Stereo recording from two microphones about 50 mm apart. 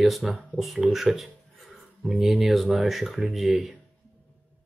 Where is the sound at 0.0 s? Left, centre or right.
Centre.